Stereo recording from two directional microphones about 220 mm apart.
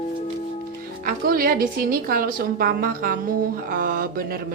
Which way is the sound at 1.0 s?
40° right (ahead or behind).